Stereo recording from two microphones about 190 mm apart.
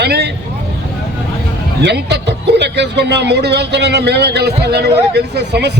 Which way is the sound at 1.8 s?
65° right (ahead or behind).